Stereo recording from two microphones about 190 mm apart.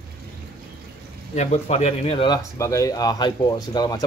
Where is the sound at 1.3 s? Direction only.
35° left (ahead or behind).